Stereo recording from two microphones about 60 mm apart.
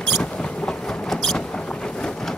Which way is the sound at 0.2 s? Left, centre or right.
Centre.